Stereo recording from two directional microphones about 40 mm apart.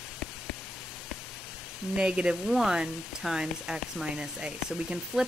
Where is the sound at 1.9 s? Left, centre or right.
Right.